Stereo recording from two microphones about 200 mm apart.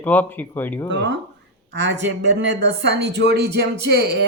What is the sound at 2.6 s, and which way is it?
Speech, 60° right (ahead or behind).